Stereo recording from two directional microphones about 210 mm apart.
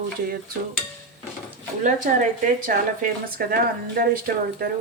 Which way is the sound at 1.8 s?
35° right (ahead or behind).